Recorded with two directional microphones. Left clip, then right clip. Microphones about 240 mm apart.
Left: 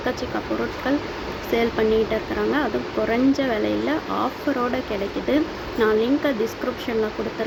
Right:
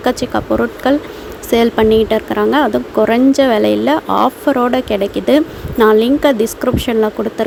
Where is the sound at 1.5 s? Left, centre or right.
Right.